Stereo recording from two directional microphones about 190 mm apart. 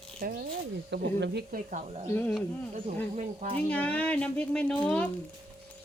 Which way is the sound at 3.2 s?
30° right (ahead or behind).